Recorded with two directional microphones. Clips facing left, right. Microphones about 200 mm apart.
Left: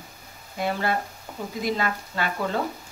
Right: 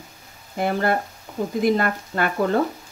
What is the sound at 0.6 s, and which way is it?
Speech, 55° right (ahead or behind).